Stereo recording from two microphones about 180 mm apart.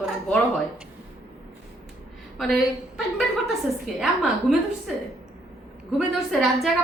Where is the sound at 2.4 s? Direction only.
Centre (ahead or behind).